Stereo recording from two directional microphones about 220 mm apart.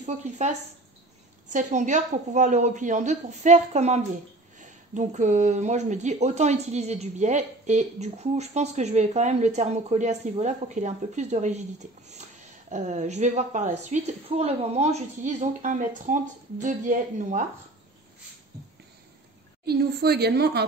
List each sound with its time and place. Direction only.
0.0 s speech: 30° right (ahead or behind)
19.6 s a woman's voice: 45° right (ahead or behind)